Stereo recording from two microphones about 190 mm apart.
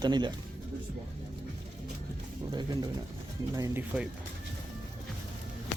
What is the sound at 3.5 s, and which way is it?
Speech, 15° right (ahead or behind).